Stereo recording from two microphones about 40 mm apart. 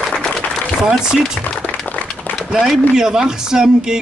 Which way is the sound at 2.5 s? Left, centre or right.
Centre.